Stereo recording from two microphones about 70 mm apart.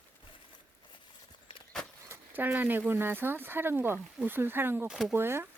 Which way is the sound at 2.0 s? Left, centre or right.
Right.